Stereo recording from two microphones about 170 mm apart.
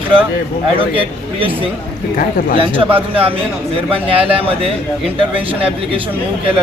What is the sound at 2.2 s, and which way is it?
Speech, 55° left (ahead or behind).